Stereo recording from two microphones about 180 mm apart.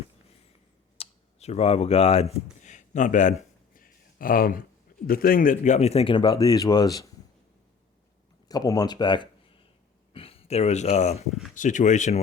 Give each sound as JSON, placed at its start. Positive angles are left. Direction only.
{"t": 0.9, "sound": "a sound", "side_deg": 35}
{"t": 5.0, "sound": "speech", "side_deg": 55}
{"t": 8.4, "sound": "speech", "side_deg": 20}
{"t": 11.3, "sound": "speech", "side_deg": 0}
{"t": 11.5, "sound": "speech", "side_deg": 45}